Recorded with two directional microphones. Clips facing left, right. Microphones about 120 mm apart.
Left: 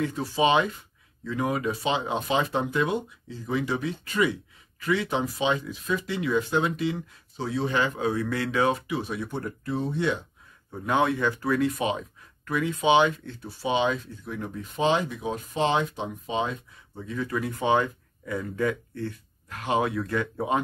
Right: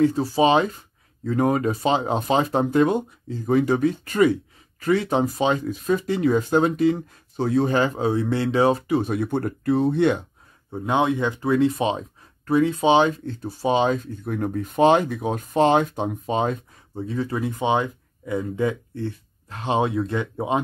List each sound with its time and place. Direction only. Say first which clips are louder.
0.0 s speech: right 6 dB; 35° right (ahead or behind); by 10.2 s 60° right (ahead or behind)
10.7 s speech: right 3 dB; 20° right (ahead or behind); by 16.5 s 50° right (ahead or behind)
16.9 s speech: right 4 dB; 30° right (ahead or behind)